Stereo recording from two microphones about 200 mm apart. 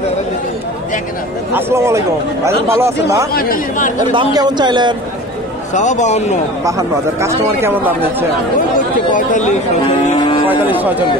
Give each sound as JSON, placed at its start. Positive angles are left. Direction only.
{"t": 1.5, "sound": "speech", "side_deg": -15}
{"t": 3.3, "sound": "speech", "side_deg": 45}
{"t": 4.1, "sound": "a man's voice", "side_deg": -20}
{"t": 5.8, "sound": "a man's voice", "side_deg": 35}
{"t": 6.6, "sound": "speech", "side_deg": -15}
{"t": 9.1, "sound": "a man's voice", "side_deg": 40}
{"t": 10.5, "sound": "speech", "side_deg": -10}